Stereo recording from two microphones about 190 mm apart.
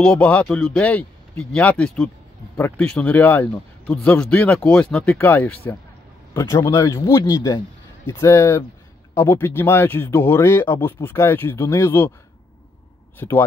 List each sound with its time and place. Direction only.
0.0 s speech: 5° left (ahead or behind)
13.2 s speech: 15° left (ahead or behind)